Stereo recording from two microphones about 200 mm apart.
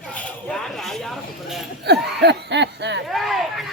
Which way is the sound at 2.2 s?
60° right (ahead or behind).